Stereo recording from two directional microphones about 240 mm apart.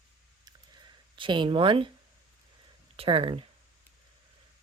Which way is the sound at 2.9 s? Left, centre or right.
Right.